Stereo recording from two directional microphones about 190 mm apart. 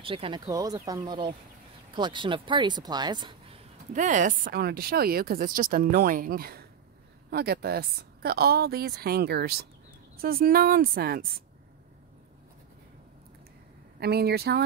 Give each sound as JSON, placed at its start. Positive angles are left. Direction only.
{"t": 0.0, "sound": "speech", "side_deg": -30}
{"t": 3.9, "sound": "speech", "side_deg": -40}
{"t": 13.9, "sound": "speech", "side_deg": -55}